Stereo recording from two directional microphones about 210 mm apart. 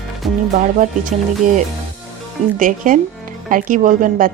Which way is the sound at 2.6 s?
40° right (ahead or behind).